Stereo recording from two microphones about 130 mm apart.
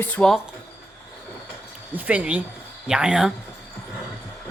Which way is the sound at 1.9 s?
10° right (ahead or behind).